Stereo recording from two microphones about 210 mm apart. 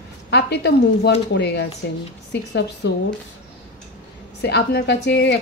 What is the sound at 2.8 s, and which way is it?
Speech, 55° left (ahead or behind).